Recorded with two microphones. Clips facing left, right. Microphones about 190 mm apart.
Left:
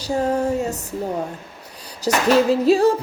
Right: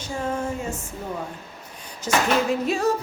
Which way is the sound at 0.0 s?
40° left (ahead or behind).